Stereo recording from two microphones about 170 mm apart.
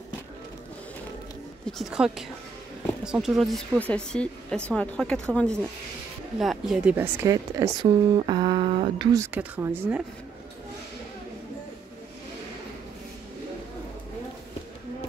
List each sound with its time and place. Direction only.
1.7 s speech: centre (ahead or behind)
7.2 s speech: 20° right (ahead or behind)